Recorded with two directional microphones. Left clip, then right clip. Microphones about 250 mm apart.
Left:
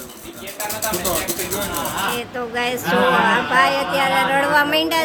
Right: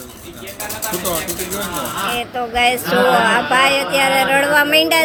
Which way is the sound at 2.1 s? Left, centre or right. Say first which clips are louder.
Right 5 dB; centre.